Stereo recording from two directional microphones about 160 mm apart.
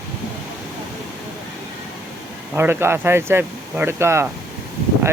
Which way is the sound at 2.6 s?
15° right (ahead or behind).